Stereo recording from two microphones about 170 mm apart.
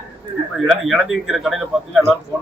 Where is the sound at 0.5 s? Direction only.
Centre (ahead or behind).